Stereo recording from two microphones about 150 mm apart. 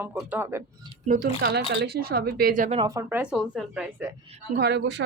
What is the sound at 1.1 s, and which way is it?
Speech, 90° right.